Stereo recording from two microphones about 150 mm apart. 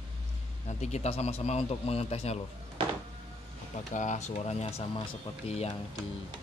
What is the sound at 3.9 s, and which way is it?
Speech, 55° left (ahead or behind).